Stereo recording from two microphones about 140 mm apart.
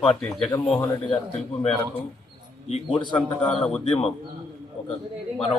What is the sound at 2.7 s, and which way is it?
Speech, 40° left (ahead or behind).